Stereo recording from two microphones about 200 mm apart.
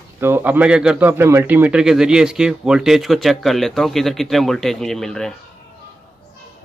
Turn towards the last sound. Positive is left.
turn(degrees=5)  # may be behind; listen again after turning